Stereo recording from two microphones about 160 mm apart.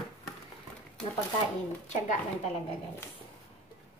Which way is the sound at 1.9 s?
45° left (ahead or behind).